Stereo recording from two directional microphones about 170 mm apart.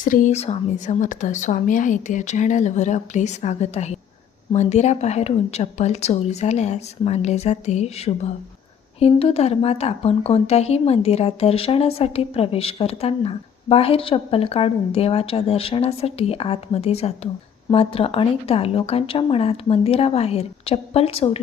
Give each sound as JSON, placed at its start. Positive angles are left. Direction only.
{"t": 0.0, "sound": "a woman's voice", "side_deg": 50}